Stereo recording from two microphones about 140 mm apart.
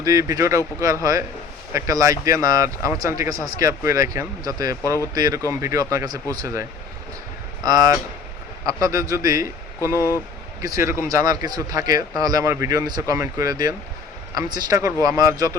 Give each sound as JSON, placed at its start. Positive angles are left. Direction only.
{"t": 0.0, "sound": "speech", "side_deg": -25}
{"t": 9.9, "sound": "speech", "side_deg": 20}
{"t": 10.6, "sound": "speech", "side_deg": -20}